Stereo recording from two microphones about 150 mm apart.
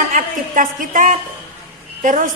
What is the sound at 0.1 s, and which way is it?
A woman's voice, 65° right (ahead or behind).